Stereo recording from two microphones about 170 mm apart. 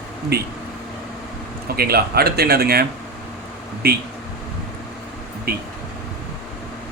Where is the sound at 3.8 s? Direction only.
70° right (ahead or behind).